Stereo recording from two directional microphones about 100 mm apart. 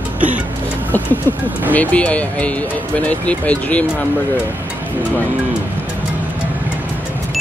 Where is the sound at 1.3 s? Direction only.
25° left (ahead or behind).